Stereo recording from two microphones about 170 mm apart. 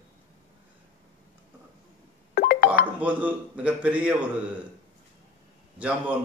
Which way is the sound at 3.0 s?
10° right (ahead or behind).